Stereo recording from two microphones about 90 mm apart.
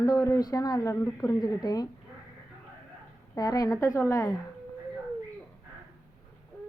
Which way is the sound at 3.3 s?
45° left (ahead or behind).